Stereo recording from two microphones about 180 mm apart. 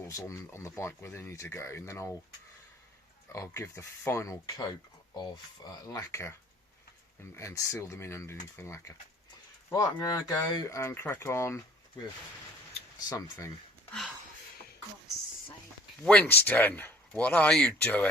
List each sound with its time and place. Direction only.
0.1 s speech: 15° left (ahead or behind)
3.3 s speech: 15° left (ahead or behind)
7.3 s speech: 15° left (ahead or behind)
13.1 s speech: 20° left (ahead or behind)
16.0 s speech: 10° left (ahead or behind)